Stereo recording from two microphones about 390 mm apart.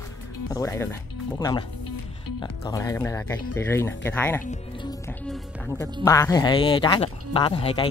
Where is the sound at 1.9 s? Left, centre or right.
Left.